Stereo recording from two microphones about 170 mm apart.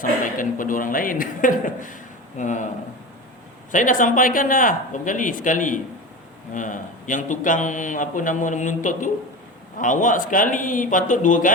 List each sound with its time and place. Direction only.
0.0 s a man's voice: 50° left (ahead or behind)
3.7 s a man's voice: 50° left (ahead or behind)